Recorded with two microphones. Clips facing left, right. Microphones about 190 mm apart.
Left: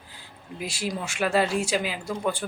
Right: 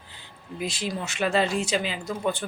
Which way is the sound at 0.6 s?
10° left (ahead or behind).